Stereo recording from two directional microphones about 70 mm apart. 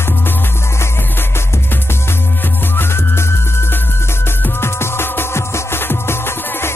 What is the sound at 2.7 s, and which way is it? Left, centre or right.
Music, left.